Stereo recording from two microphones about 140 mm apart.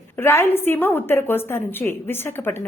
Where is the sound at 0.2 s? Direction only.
15° left (ahead or behind).